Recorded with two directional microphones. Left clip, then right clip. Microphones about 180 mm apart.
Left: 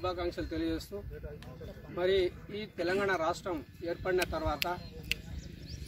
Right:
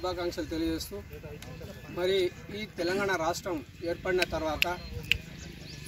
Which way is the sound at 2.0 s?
5° right (ahead or behind).